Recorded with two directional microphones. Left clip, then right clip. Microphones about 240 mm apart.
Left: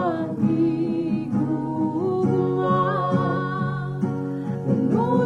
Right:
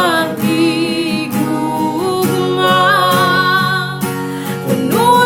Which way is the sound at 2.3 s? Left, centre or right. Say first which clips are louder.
Right 12 dB; right.